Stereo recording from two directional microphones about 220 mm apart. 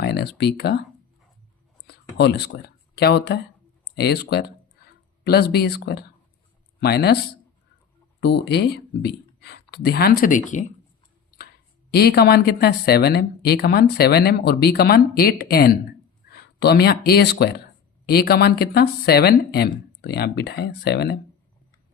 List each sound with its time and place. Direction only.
0.0 s speech: 50° left (ahead or behind)
1.9 s speech: 50° left (ahead or behind)
8.2 s speech: 50° left (ahead or behind); by 10.7 s 35° left (ahead or behind)
11.9 s speech: 45° left (ahead or behind)